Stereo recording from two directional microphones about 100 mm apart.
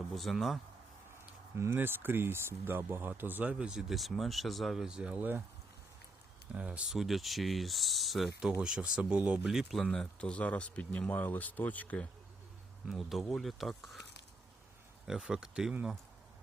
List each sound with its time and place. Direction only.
0.1 s speech: centre (ahead or behind)
1.5 s speech: 25° right (ahead or behind)
6.5 s speech: 10° right (ahead or behind); by 12.0 s 15° left (ahead or behind)
12.9 s speech: centre (ahead or behind)
15.0 s speech: 5° right (ahead or behind)